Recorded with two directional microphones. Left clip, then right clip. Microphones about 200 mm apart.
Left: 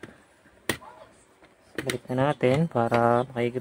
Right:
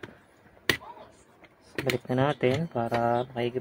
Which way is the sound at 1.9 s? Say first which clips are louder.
Left 1 dB; centre (ahead or behind).